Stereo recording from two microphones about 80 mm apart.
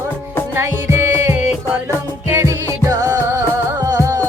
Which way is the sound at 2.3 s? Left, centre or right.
Right.